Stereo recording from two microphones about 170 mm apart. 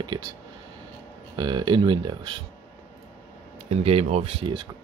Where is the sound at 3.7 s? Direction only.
35° right (ahead or behind).